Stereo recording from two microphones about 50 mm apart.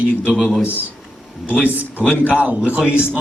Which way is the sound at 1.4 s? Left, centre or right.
Right.